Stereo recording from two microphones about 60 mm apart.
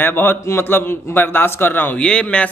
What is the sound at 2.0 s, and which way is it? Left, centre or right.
Speech, centre.